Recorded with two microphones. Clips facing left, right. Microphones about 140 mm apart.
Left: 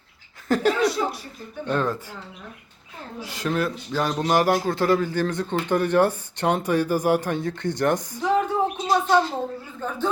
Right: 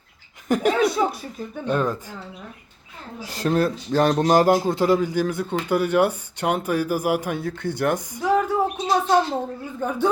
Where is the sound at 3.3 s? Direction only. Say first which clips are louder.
Right 4 dB; 35° right (ahead or behind).